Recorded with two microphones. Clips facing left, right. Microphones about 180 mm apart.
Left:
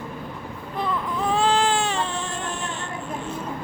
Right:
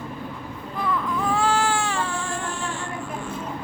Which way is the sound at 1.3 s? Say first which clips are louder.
Left 2 dB; 20° left (ahead or behind).